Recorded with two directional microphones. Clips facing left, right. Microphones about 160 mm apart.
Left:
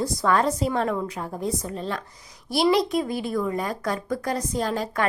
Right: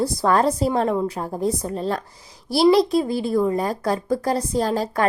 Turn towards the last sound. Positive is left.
turn(degrees=-35)  # may be behind; listen again after turning